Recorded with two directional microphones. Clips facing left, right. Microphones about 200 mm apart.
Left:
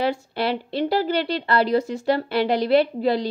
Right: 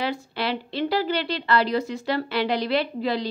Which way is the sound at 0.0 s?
50° left (ahead or behind).